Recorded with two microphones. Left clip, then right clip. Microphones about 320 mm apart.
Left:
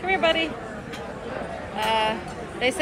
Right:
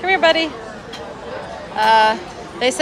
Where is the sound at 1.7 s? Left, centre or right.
Right.